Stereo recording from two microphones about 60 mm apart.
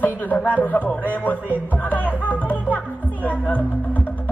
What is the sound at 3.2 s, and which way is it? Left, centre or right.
Speech, left.